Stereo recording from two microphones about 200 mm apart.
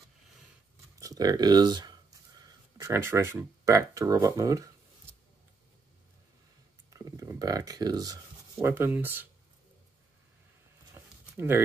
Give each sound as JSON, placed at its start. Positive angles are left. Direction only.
{"t": 0.9, "sound": "speech", "side_deg": -15}
{"t": 6.9, "sound": "speech", "side_deg": -15}
{"t": 11.0, "sound": "a sound", "side_deg": -10}